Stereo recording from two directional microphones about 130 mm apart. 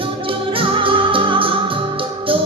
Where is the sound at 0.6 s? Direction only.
40° right (ahead or behind).